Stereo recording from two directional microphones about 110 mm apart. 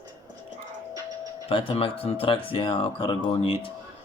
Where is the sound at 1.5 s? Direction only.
55° left (ahead or behind).